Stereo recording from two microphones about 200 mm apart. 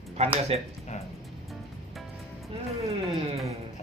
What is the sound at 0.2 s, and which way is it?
Speech, 35° right (ahead or behind).